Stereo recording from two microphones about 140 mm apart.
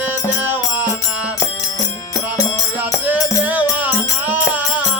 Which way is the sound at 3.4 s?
10° right (ahead or behind).